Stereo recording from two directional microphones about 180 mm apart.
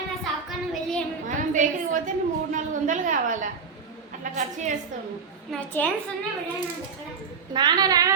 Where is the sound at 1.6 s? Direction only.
45° right (ahead or behind).